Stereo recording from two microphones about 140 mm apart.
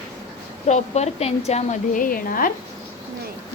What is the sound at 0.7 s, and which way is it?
A woman's voice, 50° left (ahead or behind).